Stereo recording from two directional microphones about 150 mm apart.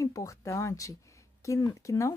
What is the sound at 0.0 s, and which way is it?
Speech, 20° left (ahead or behind).